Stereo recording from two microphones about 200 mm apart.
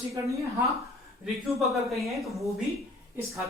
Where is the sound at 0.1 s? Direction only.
15° right (ahead or behind).